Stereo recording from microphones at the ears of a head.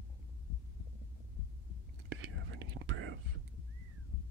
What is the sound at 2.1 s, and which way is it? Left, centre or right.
Whispering, right.